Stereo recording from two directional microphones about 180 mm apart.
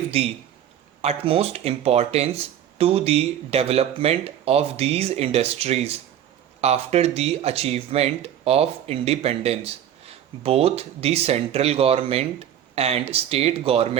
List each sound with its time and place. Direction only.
1.0 s speech: 35° right (ahead or behind)